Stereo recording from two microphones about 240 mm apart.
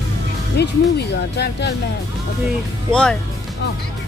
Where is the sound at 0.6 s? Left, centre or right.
Left.